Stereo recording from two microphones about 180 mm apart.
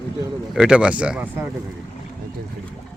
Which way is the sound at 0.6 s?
5° right (ahead or behind).